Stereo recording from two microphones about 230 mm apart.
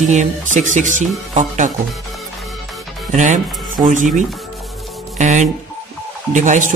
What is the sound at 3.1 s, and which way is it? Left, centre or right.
Speech, right.